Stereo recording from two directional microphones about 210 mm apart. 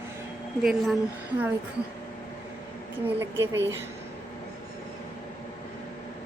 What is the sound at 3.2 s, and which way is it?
Speech, 10° right (ahead or behind).